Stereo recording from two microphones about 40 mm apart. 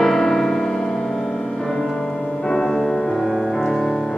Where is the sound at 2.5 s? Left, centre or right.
Centre.